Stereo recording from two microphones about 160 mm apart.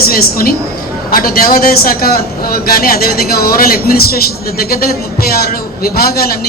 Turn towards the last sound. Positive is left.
turn(degrees=70)  # may be behind; listen again after turning